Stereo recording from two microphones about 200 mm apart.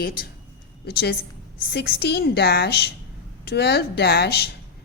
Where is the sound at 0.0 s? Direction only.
45° left (ahead or behind).